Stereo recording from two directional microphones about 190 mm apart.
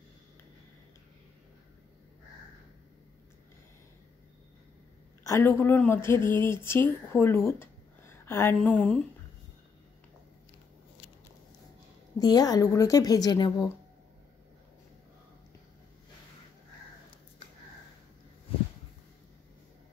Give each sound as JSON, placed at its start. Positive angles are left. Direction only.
{"t": 5.2, "sound": "speech", "side_deg": 15}
{"t": 12.2, "sound": "a woman's voice", "side_deg": 20}